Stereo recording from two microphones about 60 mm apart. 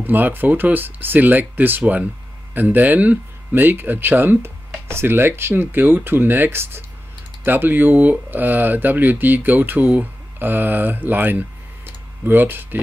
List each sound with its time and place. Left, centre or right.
0.0 s speech: right